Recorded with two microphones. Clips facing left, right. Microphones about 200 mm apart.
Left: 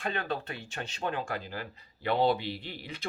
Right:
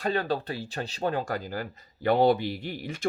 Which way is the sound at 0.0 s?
35° right (ahead or behind).